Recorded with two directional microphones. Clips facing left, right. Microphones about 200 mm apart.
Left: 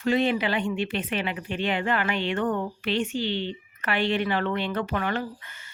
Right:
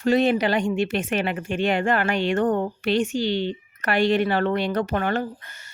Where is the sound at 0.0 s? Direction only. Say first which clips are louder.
Right 4 dB; 40° right (ahead or behind).